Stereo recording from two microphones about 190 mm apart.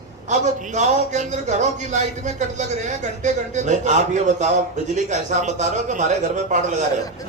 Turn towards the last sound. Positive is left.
turn(degrees=-40)  # may be behind; listen again after turning